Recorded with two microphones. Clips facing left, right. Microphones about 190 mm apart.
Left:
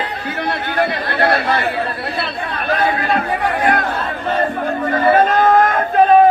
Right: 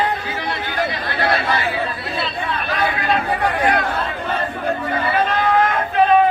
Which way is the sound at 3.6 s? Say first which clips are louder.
Left 2 dB; 50° left (ahead or behind).